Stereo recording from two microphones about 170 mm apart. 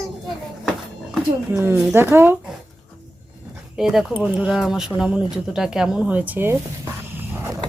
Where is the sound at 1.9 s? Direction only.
15° right (ahead or behind).